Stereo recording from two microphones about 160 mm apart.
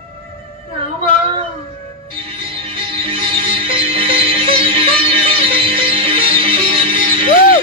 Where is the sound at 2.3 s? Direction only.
35° right (ahead or behind).